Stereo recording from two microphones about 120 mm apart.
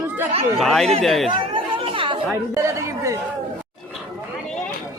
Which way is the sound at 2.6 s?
25° right (ahead or behind).